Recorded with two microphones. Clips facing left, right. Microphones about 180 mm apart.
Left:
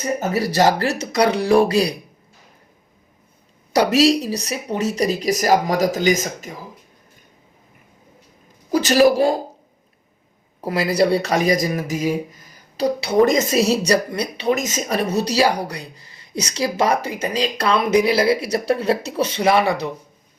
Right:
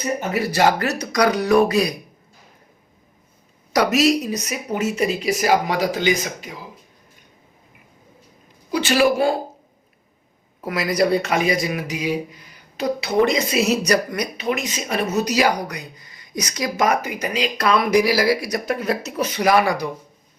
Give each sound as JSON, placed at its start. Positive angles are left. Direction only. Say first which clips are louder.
{"t": 0.2, "sound": "speech", "louder": "left 2 dB", "side_deg": 35}
{"t": 3.7, "sound": "speech", "louder": "left 2 dB", "side_deg": 30}
{"t": 8.7, "sound": "speech", "louder": "left 3 dB", "side_deg": 40}
{"t": 10.6, "sound": "speech", "louder": "left 2 dB", "side_deg": 30}
{"t": 13.3, "sound": "speech", "louder": "left 2 dB", "side_deg": 45}